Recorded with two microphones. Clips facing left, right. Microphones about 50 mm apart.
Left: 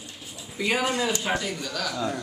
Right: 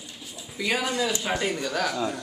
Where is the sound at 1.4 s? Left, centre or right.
Right.